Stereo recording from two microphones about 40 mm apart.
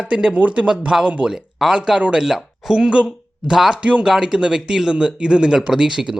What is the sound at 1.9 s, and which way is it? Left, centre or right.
Speech, right.